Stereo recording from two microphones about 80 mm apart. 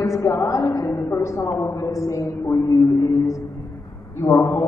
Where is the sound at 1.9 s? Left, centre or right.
Left.